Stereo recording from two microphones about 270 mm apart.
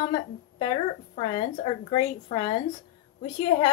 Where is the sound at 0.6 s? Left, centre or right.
Centre.